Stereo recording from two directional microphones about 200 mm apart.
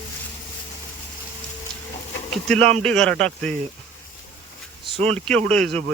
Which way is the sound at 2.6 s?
35° right (ahead or behind).